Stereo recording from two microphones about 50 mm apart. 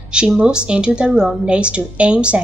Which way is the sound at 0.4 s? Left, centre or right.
Right.